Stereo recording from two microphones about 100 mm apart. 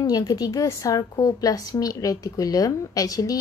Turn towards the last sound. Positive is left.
turn(degrees=35)  # may be behind; listen again after turning